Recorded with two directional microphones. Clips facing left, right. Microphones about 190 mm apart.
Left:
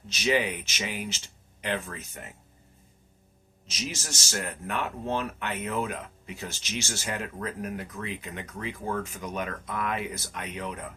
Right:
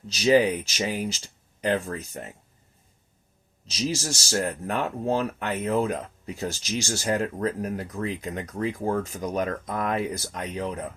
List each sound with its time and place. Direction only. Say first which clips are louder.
0.1 s speech: right 7 dB; 35° right (ahead or behind)
3.7 s speech: right 8 dB; 35° right (ahead or behind)